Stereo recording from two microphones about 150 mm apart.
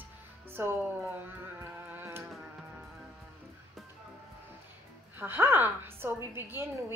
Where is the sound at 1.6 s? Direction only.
15° right (ahead or behind).